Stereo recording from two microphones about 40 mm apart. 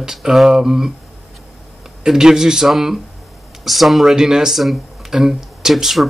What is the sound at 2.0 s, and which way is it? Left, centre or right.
Speech, centre.